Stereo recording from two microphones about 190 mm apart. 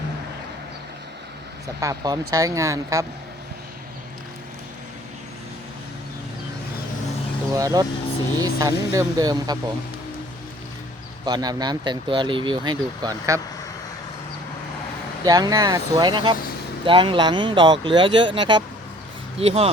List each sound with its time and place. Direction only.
1.8 s speech: 20° right (ahead or behind)
7.5 s speech: 20° right (ahead or behind)
11.3 s speech: 20° right (ahead or behind)
15.2 s speech: 20° right (ahead or behind)